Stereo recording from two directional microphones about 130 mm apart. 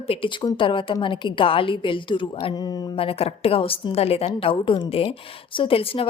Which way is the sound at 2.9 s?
45° left (ahead or behind).